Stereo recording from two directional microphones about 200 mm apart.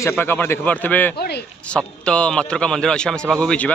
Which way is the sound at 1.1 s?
55° left (ahead or behind).